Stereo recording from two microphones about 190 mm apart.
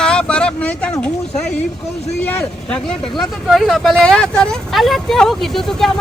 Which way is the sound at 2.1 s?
10° left (ahead or behind).